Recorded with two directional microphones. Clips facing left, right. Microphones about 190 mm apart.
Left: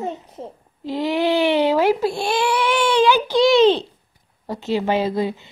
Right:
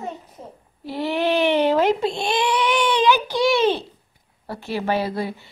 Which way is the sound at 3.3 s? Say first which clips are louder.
Left 5 dB; 10° right (ahead or behind).